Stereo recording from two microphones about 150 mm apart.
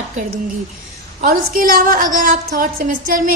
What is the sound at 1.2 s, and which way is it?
A woman's voice, 65° right (ahead or behind).